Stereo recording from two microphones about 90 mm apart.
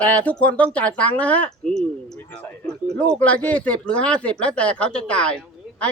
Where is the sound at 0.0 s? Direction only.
15° left (ahead or behind).